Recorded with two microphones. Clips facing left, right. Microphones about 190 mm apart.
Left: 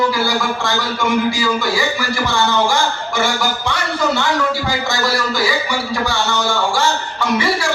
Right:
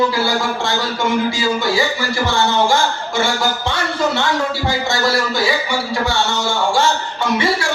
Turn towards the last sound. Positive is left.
turn(degrees=-25)  # may be behind; listen again after turning